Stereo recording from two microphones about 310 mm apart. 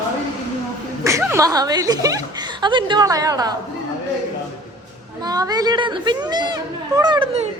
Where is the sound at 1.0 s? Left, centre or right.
Centre.